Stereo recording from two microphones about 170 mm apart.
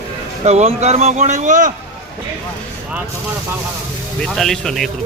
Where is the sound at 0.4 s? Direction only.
40° right (ahead or behind).